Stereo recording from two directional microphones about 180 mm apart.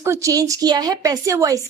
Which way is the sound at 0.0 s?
15° right (ahead or behind).